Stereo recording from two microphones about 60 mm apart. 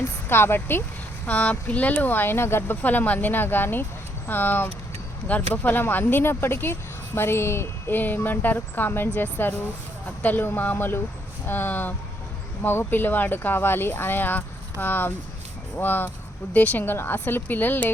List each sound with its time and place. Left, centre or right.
0.0 s a woman's voice: left
1.3 s speech: left
2.8 s speech: left
7.9 s speech: left